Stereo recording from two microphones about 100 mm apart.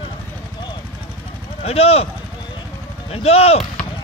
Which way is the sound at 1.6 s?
90° left.